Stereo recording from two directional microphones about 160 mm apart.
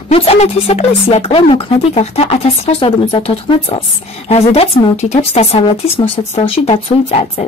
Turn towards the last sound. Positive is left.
turn(degrees=40)  # may be behind; listen again after turning